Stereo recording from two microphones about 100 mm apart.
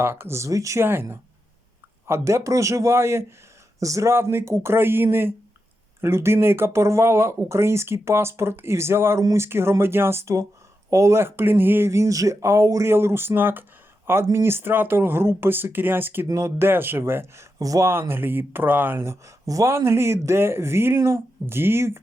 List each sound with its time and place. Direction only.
0.0 s speech: 25° right (ahead or behind)